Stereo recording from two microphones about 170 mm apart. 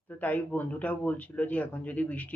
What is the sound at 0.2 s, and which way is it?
A man's voice, 10° left (ahead or behind).